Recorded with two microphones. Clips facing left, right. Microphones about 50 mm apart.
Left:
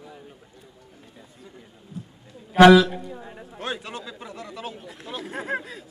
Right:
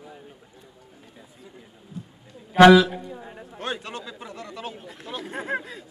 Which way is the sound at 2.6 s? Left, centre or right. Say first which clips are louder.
Even; centre.